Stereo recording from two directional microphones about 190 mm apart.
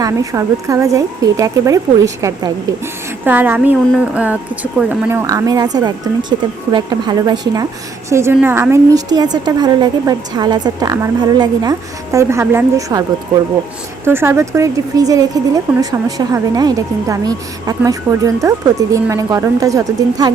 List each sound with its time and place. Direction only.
0.0 s a woman's voice: 15° right (ahead or behind)